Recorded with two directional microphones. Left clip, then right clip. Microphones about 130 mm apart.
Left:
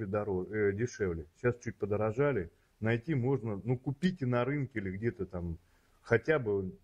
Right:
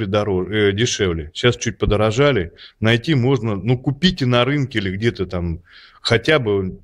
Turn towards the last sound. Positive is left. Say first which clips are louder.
# right 14 dB
turn(degrees=-15)  # may be behind; listen again after turning